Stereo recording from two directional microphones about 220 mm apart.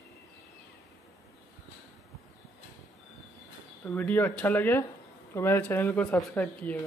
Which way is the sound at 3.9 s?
10° left (ahead or behind).